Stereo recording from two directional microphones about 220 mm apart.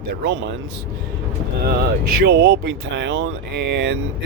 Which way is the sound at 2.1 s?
50° right (ahead or behind).